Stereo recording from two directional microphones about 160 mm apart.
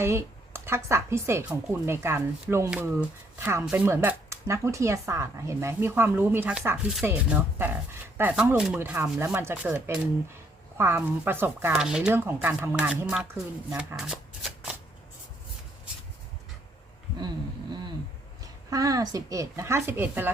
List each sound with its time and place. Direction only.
0.0 s speech: 15° right (ahead or behind)
8.2 s speech: 10° right (ahead or behind)
13.7 s shuffling cards: 5° right (ahead or behind)
18.7 s speech: 20° right (ahead or behind)